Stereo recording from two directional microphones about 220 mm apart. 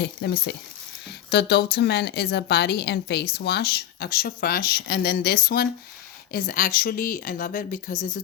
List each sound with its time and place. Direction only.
0.0 s a woman's voice: 50° left (ahead or behind)